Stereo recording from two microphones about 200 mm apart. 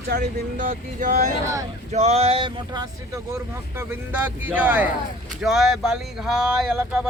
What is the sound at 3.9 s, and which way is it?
Speech, 10° right (ahead or behind).